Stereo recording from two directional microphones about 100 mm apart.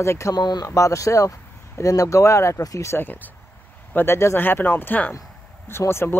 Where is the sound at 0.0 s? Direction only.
30° left (ahead or behind).